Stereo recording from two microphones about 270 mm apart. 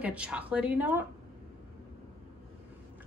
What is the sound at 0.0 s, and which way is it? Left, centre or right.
A woman's voice, centre.